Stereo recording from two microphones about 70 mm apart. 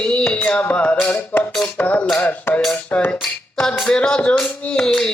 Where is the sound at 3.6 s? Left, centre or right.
Centre.